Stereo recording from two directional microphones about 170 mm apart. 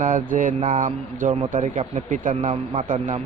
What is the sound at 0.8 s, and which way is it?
Speech, 50° right (ahead or behind).